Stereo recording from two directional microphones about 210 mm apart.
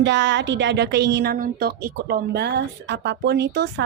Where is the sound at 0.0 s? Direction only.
60° right (ahead or behind).